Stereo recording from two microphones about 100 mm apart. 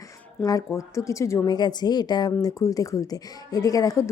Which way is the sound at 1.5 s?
45° left (ahead or behind).